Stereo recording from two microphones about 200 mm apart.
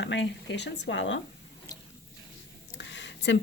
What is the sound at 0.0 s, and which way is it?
Speech, 65° left (ahead or behind).